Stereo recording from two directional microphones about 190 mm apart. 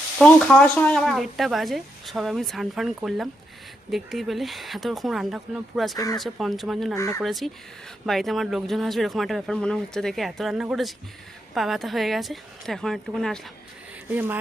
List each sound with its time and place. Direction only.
0.2 s speech: 5° left (ahead or behind)
6.9 s speech: 15° left (ahead or behind)
7.2 s speech: centre (ahead or behind)
14.1 s speech: 10° right (ahead or behind)